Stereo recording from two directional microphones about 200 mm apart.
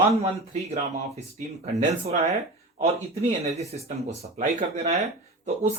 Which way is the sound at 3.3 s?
35° right (ahead or behind).